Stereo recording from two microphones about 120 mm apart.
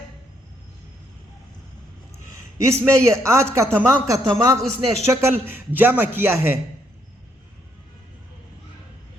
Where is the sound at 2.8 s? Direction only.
25° right (ahead or behind).